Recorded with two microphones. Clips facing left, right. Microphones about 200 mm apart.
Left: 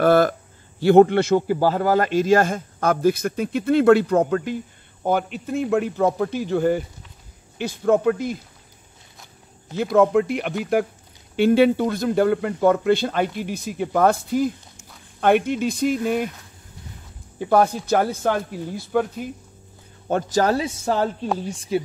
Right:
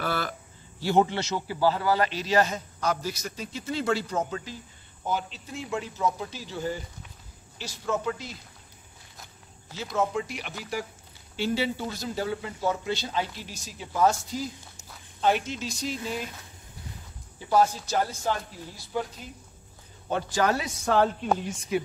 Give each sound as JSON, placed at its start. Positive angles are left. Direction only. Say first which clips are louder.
{"t": 0.0, "sound": "a man's voice", "louder": "left 14 dB", "side_deg": 50}
{"t": 9.8, "sound": "a man's voice", "louder": "left 11 dB", "side_deg": 55}
{"t": 17.4, "sound": "a man's voice", "louder": "left 5 dB", "side_deg": 60}
{"t": 20.1, "sound": "a man's voice", "louder": "left 6 dB", "side_deg": 45}